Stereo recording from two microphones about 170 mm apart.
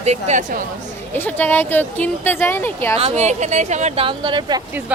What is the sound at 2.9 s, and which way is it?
Speech, 35° right (ahead or behind).